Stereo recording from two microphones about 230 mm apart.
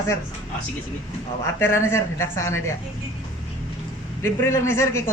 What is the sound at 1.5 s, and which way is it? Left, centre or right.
Speech, centre.